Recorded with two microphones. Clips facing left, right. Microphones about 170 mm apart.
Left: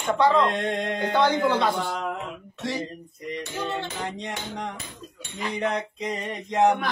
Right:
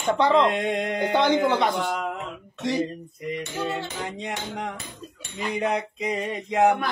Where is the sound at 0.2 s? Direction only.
20° right (ahead or behind).